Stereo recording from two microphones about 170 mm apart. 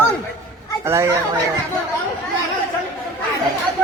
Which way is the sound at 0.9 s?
15° right (ahead or behind).